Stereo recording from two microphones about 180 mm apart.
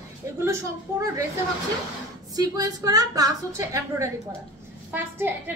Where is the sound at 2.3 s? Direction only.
20° right (ahead or behind).